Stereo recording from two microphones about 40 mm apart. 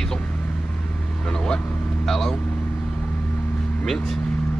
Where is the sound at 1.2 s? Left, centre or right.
Centre.